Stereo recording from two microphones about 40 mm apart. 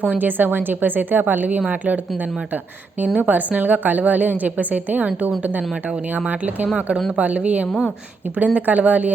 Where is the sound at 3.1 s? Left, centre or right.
Right.